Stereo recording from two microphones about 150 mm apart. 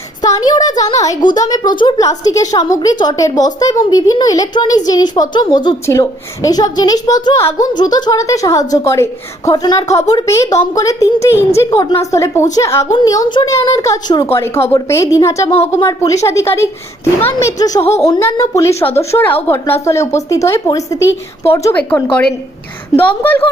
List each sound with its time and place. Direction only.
0.3 s a woman's voice: 25° left (ahead or behind)
9.8 s speech: 45° left (ahead or behind)
10.1 s a woman's voice: 20° left (ahead or behind)
17.7 s speech: 45° left (ahead or behind)
18.0 s a woman's voice: 20° left (ahead or behind)